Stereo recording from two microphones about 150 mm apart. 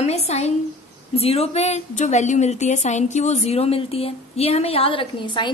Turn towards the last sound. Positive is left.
turn(degrees=35)  # may be behind; listen again after turning